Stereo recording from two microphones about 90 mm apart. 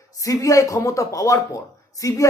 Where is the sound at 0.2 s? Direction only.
40° left (ahead or behind).